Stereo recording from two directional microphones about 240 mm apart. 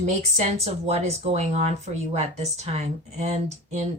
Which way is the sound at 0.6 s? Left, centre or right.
Right.